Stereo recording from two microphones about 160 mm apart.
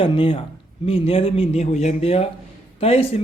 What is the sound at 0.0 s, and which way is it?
A man's voice, 35° left (ahead or behind).